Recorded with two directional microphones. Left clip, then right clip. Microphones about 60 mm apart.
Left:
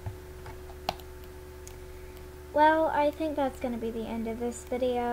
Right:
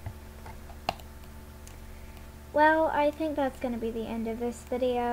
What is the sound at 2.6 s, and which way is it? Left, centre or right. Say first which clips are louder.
A woman's voice: even; centre.